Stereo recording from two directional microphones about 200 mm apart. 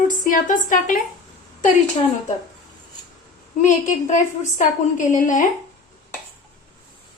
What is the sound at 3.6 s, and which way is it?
A woman's voice, 40° left (ahead or behind).